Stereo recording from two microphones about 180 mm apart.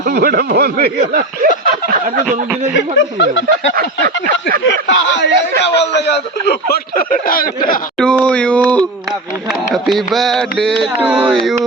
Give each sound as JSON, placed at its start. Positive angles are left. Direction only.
{"t": 0.0, "sound": "speech", "side_deg": -55}
{"t": 2.7, "sound": "speech", "side_deg": 85}
{"t": 3.8, "sound": "speech", "side_deg": -55}
{"t": 4.6, "sound": "speech", "side_deg": 85}
{"t": 7.9, "sound": "speech", "side_deg": 5}